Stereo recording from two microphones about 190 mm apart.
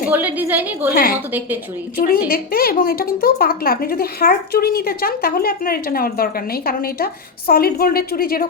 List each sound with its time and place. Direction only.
0.1 s a woman's voice: 10° right (ahead or behind)
2.0 s a woman's voice: 50° left (ahead or behind)